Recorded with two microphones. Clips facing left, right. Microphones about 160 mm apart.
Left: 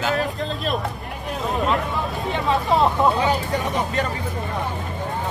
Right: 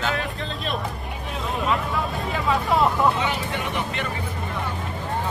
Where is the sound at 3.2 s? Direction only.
40° left (ahead or behind).